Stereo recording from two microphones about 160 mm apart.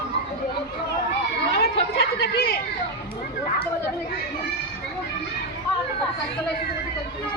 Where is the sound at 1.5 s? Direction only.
85° left.